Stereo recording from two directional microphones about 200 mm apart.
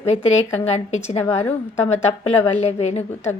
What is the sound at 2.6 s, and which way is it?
Speech, 30° left (ahead or behind).